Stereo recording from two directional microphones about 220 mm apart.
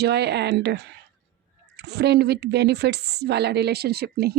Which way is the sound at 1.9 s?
50° right (ahead or behind).